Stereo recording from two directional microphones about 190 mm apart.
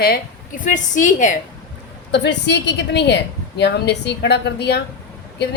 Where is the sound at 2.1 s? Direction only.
65° left (ahead or behind).